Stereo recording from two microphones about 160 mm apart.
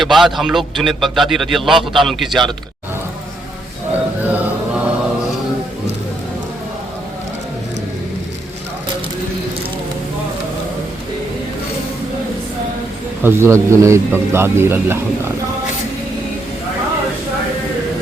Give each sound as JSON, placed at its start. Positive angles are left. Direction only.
{"t": 0.0, "sound": "a man's voice", "side_deg": 0}
{"t": 4.2, "sound": "music", "side_deg": -10}
{"t": 13.2, "sound": "a man's voice", "side_deg": -15}